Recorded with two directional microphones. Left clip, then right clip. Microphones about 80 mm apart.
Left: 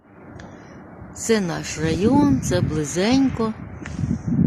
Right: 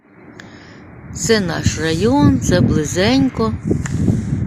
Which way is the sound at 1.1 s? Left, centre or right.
Centre.